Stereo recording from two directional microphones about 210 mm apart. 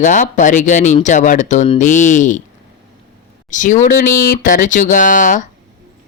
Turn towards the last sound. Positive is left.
turn(degrees=35)  # may be behind; listen again after turning